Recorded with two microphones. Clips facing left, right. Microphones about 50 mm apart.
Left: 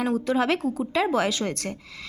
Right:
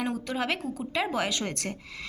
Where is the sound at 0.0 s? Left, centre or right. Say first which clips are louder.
Left 7 dB; centre.